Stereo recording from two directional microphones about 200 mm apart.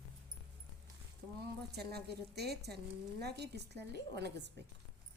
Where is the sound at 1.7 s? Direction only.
55° right (ahead or behind).